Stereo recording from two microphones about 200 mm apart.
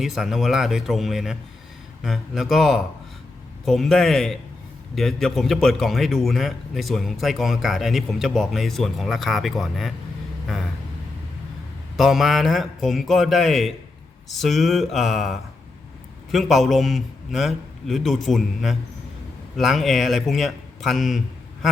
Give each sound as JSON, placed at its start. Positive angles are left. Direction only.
{"t": 0.0, "sound": "a man's voice", "side_deg": 0}
{"t": 11.9, "sound": "a man's voice", "side_deg": 0}